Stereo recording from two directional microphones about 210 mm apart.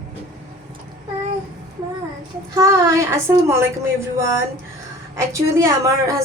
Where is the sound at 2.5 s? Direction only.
15° right (ahead or behind).